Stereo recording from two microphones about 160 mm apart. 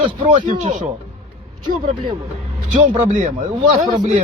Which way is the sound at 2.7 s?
50° right (ahead or behind).